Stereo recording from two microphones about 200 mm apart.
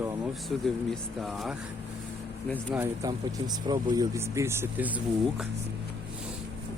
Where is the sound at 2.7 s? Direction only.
15° right (ahead or behind).